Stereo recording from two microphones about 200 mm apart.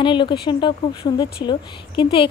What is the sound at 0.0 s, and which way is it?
Speech, 25° left (ahead or behind).